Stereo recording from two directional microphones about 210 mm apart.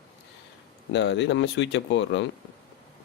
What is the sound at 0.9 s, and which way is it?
Speech, 55° left (ahead or behind).